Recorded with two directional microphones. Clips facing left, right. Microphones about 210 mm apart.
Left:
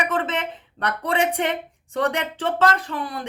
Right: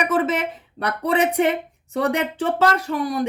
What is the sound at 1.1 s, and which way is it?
Speech, 30° left (ahead or behind).